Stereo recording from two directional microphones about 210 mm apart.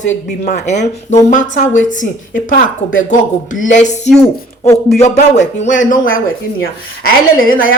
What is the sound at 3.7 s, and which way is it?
A woman's voice, 35° left (ahead or behind).